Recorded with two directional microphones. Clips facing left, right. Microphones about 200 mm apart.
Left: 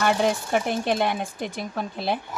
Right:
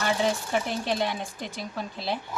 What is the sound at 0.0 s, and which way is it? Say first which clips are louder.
Speech: left 4 dB; 55° left (ahead or behind).